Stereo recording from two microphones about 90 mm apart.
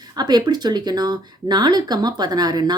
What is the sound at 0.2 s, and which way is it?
Speech, 50° right (ahead or behind).